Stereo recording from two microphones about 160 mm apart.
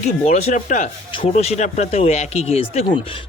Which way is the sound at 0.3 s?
50° left (ahead or behind).